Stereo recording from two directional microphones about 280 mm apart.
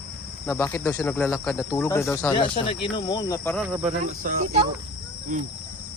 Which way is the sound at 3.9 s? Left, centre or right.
Right.